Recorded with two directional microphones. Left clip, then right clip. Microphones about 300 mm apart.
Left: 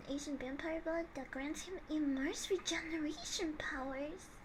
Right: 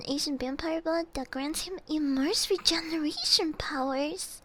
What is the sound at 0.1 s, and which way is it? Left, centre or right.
Speech, right.